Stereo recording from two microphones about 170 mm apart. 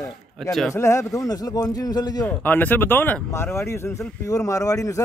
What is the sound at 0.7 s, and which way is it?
Speech, 15° left (ahead or behind).